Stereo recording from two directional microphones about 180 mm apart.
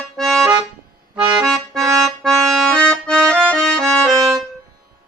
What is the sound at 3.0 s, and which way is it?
Accordion, 10° right (ahead or behind).